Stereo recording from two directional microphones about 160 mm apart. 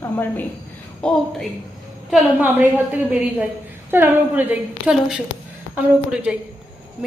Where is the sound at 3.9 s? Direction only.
10° right (ahead or behind).